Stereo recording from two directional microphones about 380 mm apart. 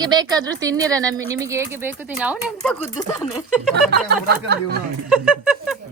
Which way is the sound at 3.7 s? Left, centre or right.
Right.